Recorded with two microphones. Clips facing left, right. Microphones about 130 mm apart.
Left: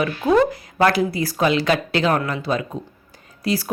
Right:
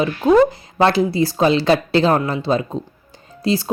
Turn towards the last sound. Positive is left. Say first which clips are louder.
# right 3 dB
turn(degrees=-25)  # may be behind; listen again after turning